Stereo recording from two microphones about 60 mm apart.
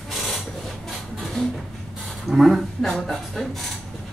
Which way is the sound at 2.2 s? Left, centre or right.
Centre.